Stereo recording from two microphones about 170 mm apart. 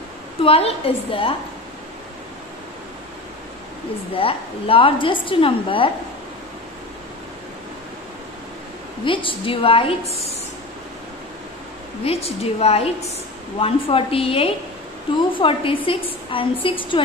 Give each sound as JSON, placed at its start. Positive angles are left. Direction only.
{"t": 0.4, "sound": "a woman's voice", "side_deg": 35}
{"t": 4.2, "sound": "a woman's voice", "side_deg": 30}
{"t": 9.0, "sound": "a woman's voice", "side_deg": 30}
{"t": 12.0, "sound": "a woman's voice", "side_deg": 35}